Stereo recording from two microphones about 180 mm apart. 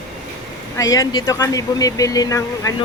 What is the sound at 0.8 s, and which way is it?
Speech, 20° left (ahead or behind).